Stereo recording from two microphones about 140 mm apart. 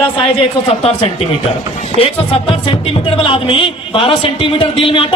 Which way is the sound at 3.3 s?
40° left (ahead or behind).